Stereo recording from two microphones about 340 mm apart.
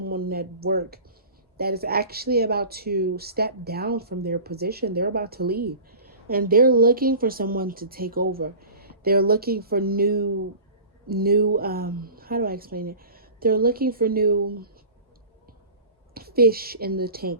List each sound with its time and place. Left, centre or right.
0.0 s a sound: right
1.5 s speech: right
16.1 s speech: right